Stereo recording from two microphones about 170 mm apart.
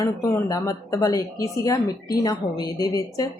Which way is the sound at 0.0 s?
20° left (ahead or behind).